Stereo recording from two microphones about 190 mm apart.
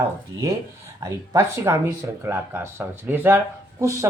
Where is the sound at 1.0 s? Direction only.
15° right (ahead or behind).